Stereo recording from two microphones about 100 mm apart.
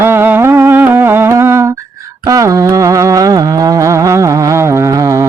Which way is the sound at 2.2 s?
35° right (ahead or behind).